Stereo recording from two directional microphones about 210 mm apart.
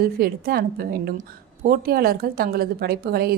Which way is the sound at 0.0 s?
45° right (ahead or behind).